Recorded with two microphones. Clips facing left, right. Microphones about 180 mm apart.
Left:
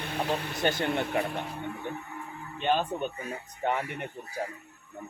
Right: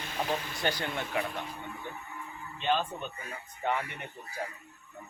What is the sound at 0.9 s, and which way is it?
Speech, 50° left (ahead or behind).